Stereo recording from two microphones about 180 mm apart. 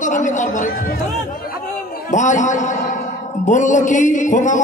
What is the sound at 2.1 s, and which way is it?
A man's voice, 45° left (ahead or behind).